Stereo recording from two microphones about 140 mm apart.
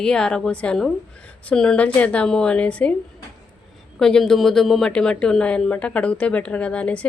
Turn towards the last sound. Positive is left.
turn(degrees=10)  # may be behind; listen again after turning